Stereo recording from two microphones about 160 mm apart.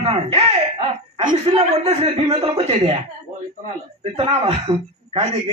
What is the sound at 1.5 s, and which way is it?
A man's voice, 40° right (ahead or behind).